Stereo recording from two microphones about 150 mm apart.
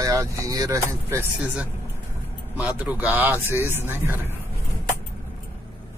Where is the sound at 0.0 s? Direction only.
20° right (ahead or behind).